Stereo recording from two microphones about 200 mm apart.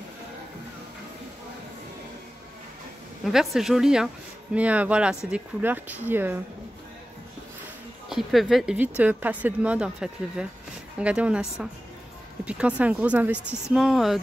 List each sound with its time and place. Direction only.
3.3 s speech: centre (ahead or behind)
8.1 s speech: centre (ahead or behind)